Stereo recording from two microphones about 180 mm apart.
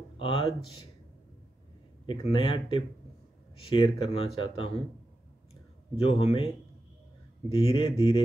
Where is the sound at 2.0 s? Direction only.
30° left (ahead or behind).